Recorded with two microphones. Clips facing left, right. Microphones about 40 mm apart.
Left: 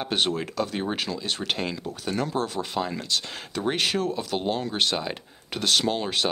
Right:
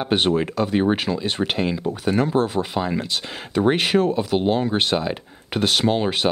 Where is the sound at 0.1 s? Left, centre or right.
Right.